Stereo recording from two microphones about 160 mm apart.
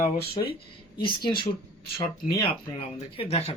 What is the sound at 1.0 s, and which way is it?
Speech, 30° left (ahead or behind).